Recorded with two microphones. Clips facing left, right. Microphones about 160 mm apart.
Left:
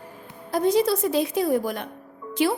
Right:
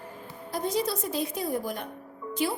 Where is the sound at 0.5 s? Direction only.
75° left (ahead or behind).